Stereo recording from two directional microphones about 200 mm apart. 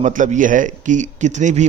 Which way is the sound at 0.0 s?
40° right (ahead or behind).